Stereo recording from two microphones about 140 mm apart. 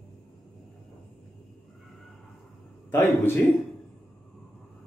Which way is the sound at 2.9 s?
15° left (ahead or behind).